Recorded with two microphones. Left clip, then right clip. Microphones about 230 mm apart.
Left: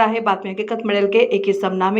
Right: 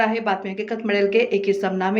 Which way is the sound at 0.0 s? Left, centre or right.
Centre.